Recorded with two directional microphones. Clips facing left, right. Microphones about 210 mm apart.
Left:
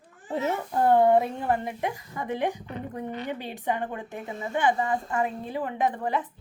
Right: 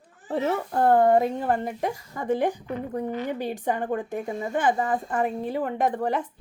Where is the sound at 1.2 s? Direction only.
40° right (ahead or behind).